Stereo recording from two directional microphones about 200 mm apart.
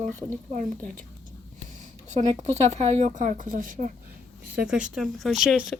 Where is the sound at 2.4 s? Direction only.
35° right (ahead or behind).